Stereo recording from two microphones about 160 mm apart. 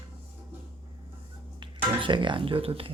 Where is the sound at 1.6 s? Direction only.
30° right (ahead or behind).